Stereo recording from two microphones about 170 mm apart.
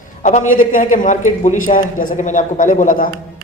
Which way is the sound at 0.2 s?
45° left (ahead or behind).